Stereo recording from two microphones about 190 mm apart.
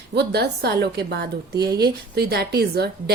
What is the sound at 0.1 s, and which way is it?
A woman's voice, 60° right (ahead or behind).